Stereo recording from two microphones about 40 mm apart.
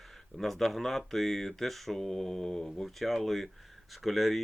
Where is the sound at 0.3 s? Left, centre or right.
Centre.